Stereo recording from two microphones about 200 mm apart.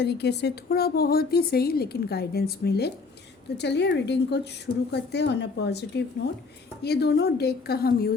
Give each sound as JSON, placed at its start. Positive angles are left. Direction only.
{"t": 0.0, "sound": "a woman's voice", "side_deg": 55}